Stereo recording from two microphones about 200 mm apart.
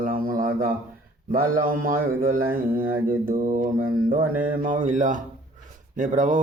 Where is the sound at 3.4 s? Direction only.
40° right (ahead or behind).